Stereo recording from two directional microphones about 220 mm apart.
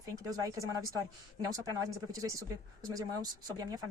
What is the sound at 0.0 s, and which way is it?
A woman's voice, 15° right (ahead or behind).